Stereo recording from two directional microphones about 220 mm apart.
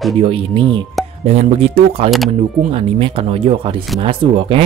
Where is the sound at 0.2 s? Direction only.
25° right (ahead or behind).